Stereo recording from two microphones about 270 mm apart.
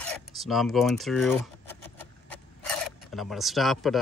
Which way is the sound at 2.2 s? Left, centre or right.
Centre.